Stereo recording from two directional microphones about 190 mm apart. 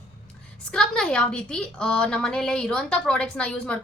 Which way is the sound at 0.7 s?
5° left (ahead or behind).